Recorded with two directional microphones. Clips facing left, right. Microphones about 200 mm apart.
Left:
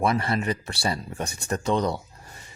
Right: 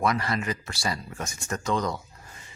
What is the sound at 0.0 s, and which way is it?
Speech, 30° left (ahead or behind).